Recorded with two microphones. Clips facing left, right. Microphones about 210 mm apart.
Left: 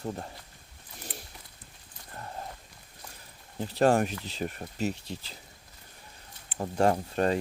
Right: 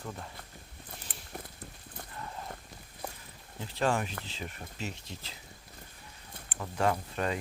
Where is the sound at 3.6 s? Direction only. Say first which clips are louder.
Left 7 dB; 45° left (ahead or behind).